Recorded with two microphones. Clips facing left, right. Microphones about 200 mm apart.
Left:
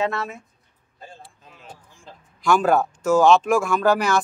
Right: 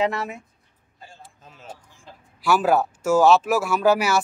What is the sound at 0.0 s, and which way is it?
Speech, 15° right (ahead or behind).